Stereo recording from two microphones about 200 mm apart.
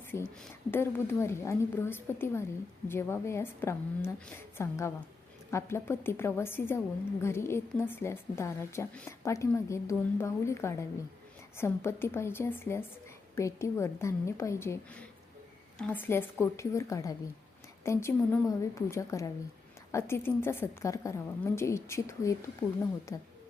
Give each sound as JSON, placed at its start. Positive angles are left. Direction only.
{"t": 0.3, "sound": "a woman's voice", "side_deg": 10}